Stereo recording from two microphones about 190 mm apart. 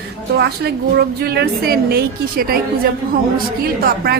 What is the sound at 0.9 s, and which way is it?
Speech, 55° right (ahead or behind).